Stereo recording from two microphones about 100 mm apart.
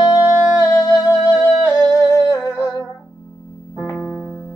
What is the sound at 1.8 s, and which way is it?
Humming, 35° left (ahead or behind).